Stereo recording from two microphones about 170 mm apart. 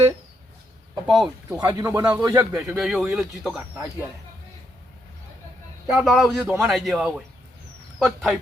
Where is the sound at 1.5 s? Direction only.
15° right (ahead or behind).